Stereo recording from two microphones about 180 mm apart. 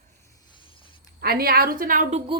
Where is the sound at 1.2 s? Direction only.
55° right (ahead or behind).